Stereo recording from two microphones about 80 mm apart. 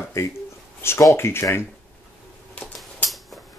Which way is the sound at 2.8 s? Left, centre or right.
Centre.